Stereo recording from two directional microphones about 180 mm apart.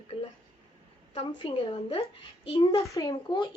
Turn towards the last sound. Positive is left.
turn(degrees=25)  # may be behind; listen again after turning